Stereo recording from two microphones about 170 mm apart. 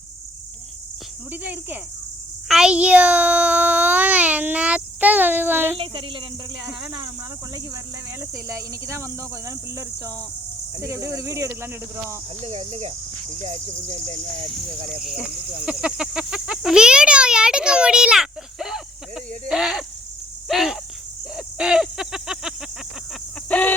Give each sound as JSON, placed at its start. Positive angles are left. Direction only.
{"t": 1.3, "sound": "speech", "side_deg": -10}
{"t": 2.5, "sound": "babbling", "side_deg": -5}
{"t": 5.7, "sound": "cricket", "side_deg": -30}
{"t": 8.2, "sound": "speech", "side_deg": -15}
{"t": 12.5, "sound": "cricket", "side_deg": -40}
{"t": 15.0, "sound": "a child's voice", "side_deg": -5}
{"t": 20.5, "sound": "cricket", "side_deg": 0}
{"t": 21.3, "sound": "a sound", "side_deg": -5}
{"t": 23.5, "sound": "chicken", "side_deg": 10}